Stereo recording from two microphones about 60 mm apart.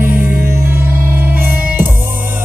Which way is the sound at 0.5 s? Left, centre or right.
Right.